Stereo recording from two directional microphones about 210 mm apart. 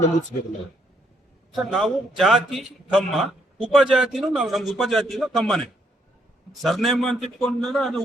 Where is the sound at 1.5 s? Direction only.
Centre (ahead or behind).